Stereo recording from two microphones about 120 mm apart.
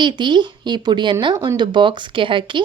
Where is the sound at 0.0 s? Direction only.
40° right (ahead or behind).